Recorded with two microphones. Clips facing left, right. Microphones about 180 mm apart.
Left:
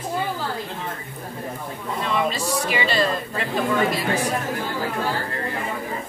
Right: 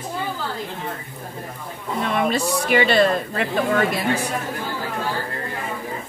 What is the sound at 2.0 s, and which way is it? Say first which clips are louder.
Speech: right 2 dB; 60° right (ahead or behind).